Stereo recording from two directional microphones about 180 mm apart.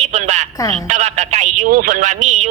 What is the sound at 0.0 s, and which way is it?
A woman's voice, 35° right (ahead or behind).